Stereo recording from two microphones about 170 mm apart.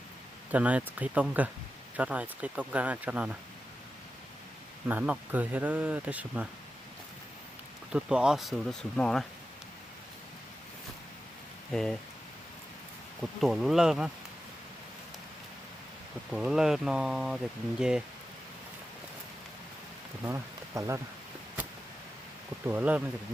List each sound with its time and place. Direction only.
0.5 s speech: 10° right (ahead or behind)
4.9 s speech: 10° right (ahead or behind)
7.9 s speech: 5° right (ahead or behind)
11.7 s speech: 5° left (ahead or behind)
13.4 s speech: centre (ahead or behind)
16.3 s speech: 5° right (ahead or behind)
20.2 s speech: 15° right (ahead or behind)
22.6 s speech: 10° right (ahead or behind)